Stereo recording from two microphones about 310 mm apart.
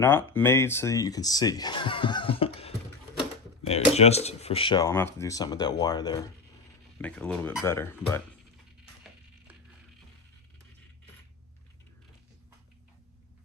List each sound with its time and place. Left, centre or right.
0.0 s speech: centre